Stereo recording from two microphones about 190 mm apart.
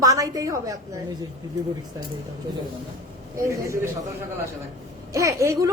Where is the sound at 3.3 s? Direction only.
15° right (ahead or behind).